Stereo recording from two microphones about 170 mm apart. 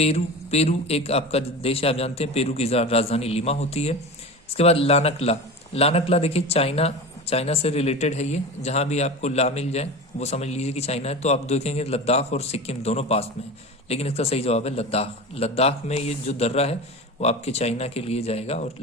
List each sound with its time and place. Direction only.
0.0 s a man's voice: 40° left (ahead or behind)